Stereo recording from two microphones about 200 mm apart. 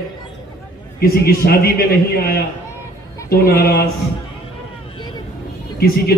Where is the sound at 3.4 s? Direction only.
50° left (ahead or behind).